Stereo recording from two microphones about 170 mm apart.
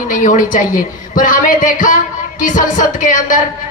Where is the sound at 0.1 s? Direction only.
50° left (ahead or behind).